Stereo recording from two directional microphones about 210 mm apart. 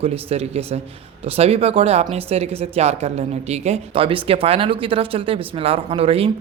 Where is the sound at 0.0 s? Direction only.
30° right (ahead or behind).